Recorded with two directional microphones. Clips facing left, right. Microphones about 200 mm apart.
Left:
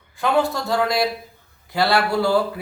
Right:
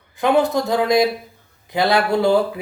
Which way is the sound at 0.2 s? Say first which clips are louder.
Right 4 dB; 20° right (ahead or behind).